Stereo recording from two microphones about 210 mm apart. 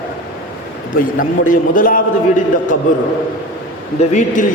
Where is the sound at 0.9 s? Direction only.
40° left (ahead or behind).